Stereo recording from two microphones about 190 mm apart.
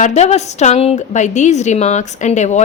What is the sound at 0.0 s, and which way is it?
A woman's voice, 35° left (ahead or behind).